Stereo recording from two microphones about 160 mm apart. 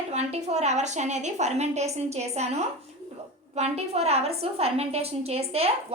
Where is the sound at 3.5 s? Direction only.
40° right (ahead or behind).